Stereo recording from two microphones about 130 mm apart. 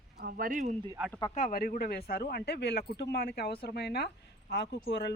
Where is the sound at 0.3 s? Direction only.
90° right.